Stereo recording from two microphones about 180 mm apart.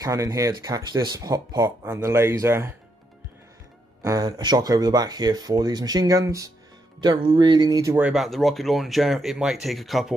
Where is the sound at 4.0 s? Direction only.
20° right (ahead or behind).